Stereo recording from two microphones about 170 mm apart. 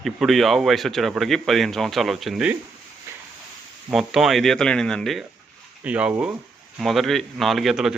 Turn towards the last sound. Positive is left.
turn(degrees=0)  # may be behind; listen again after turning